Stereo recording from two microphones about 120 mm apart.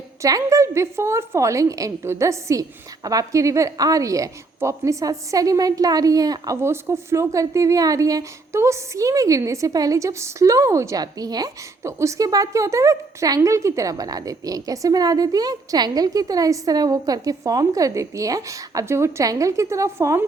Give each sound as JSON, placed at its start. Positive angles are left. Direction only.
{"t": 0.2, "sound": "a woman's voice", "side_deg": -30}